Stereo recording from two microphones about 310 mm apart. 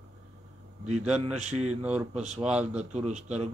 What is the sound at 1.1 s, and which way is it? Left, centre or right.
Speech, right.